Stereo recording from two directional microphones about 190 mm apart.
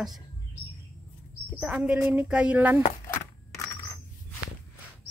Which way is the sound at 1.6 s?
5° right (ahead or behind).